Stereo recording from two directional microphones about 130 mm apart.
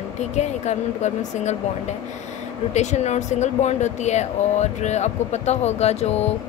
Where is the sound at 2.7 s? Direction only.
65° left (ahead or behind).